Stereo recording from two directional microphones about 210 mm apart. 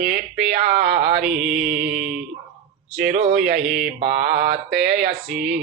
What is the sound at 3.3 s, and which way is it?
Mantra, 5° right (ahead or behind).